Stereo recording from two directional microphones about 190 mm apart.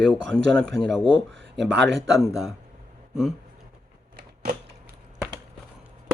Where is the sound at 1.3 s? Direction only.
75° right (ahead or behind).